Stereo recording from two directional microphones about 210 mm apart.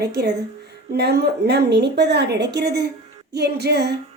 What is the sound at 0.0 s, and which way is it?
A woman's voice, 50° right (ahead or behind).